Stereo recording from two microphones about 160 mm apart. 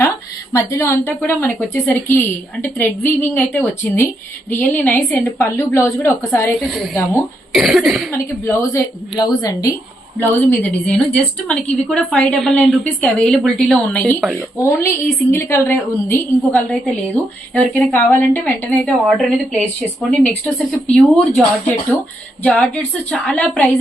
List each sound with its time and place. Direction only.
0.5 s a woman's voice: 20° left (ahead or behind)
6.6 s a woman's voice: centre (ahead or behind)
8.4 s a woman's voice: 20° left (ahead or behind)
16.5 s a woman's voice: centre (ahead or behind)
22.4 s a woman's voice: 10° left (ahead or behind)